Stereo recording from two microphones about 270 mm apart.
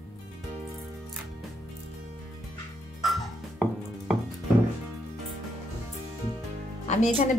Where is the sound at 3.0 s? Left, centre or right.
Centre.